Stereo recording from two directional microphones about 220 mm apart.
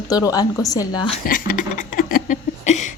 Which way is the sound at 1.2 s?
40° left (ahead or behind).